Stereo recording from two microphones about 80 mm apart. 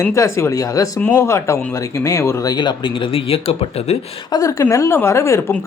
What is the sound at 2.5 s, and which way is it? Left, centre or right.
Speech, left.